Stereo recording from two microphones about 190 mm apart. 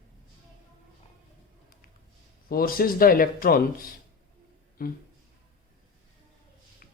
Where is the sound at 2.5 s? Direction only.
50° left (ahead or behind).